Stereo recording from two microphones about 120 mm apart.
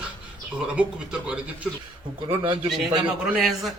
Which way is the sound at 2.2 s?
45° right (ahead or behind).